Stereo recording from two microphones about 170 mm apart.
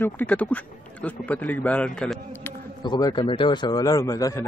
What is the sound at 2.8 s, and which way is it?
A man's voice, 25° left (ahead or behind).